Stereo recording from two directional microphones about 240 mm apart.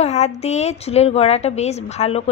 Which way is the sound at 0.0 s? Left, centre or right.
Left.